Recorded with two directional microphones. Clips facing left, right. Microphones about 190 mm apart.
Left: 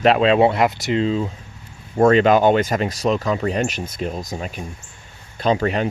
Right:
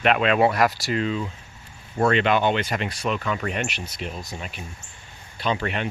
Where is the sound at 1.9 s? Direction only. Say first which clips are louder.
Left 7 dB; 40° left (ahead or behind).